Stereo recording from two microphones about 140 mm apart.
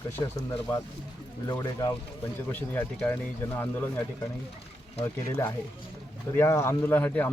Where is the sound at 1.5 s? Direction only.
25° left (ahead or behind).